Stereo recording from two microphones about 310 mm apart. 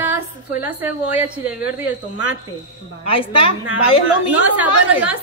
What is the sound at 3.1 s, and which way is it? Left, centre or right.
Speech, centre.